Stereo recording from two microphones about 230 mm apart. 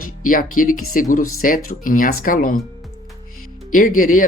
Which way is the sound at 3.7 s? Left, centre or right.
Left.